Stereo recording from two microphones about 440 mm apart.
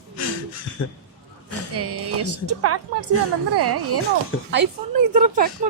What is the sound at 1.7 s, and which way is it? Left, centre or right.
Speech, right.